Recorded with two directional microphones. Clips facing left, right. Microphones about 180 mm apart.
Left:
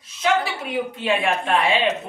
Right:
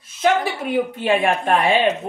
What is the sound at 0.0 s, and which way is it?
A woman's voice, 50° right (ahead or behind).